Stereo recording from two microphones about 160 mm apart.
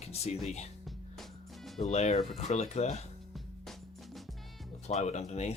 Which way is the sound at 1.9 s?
45° left (ahead or behind).